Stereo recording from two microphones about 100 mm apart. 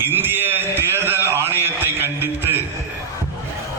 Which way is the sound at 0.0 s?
20° right (ahead or behind).